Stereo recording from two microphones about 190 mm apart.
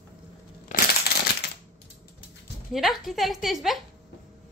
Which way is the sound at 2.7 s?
Centre (ahead or behind).